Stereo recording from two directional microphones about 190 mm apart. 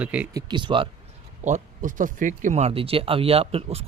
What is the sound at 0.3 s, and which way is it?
Speech, 25° right (ahead or behind).